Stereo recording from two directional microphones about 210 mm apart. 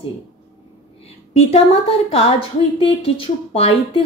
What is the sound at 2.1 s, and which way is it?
Speech, 25° left (ahead or behind).